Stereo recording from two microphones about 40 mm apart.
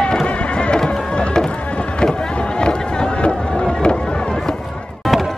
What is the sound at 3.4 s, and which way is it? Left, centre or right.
Vehicle, left.